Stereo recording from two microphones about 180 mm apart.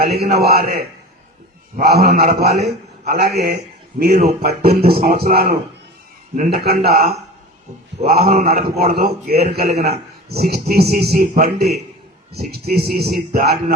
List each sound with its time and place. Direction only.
0.3 s speech: 60° right (ahead or behind)
1.9 s speech: 60° right (ahead or behind)